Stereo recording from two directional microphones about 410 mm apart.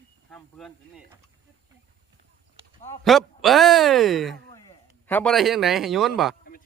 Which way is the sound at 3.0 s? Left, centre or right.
Centre.